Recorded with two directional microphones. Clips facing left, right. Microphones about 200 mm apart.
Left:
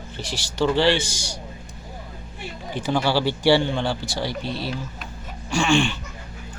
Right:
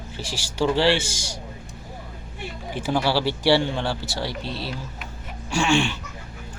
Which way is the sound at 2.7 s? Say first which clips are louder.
Left 1 dB; 5° right (ahead or behind).